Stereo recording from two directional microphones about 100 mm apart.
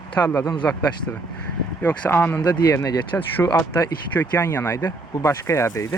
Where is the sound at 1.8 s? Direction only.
15° left (ahead or behind).